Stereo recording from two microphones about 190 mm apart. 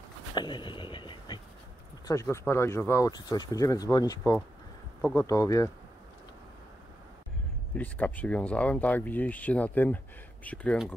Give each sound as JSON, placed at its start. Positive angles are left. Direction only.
{"t": 0.3, "sound": "a sound", "side_deg": 25}
{"t": 2.0, "sound": "speech", "side_deg": 15}
{"t": 5.2, "sound": "speech", "side_deg": 20}
{"t": 7.7, "sound": "speech", "side_deg": 10}